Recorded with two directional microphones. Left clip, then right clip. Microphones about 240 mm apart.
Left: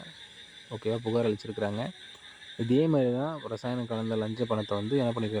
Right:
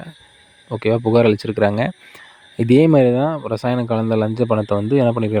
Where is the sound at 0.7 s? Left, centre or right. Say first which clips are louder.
Right 14 dB; right.